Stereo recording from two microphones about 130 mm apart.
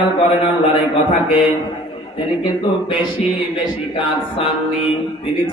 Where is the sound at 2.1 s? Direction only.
40° left (ahead or behind).